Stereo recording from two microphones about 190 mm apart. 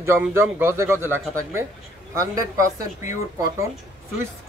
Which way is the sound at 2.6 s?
40° left (ahead or behind).